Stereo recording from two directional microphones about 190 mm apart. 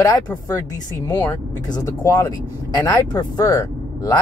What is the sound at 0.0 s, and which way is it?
Speech, 20° left (ahead or behind).